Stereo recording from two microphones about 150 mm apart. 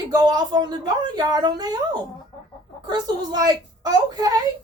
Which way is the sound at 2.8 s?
25° right (ahead or behind).